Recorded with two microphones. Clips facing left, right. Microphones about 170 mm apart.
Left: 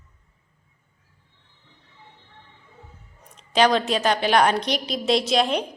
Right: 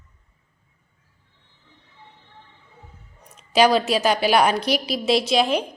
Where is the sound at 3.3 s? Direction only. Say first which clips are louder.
Right 2 dB; 10° right (ahead or behind).